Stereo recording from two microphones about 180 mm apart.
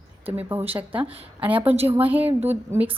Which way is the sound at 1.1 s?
30° right (ahead or behind).